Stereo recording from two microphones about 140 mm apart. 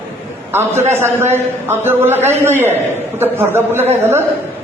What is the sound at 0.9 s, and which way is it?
A man's voice, 15° right (ahead or behind).